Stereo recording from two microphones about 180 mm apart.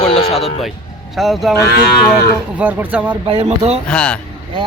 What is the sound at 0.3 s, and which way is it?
Speech, centre (ahead or behind).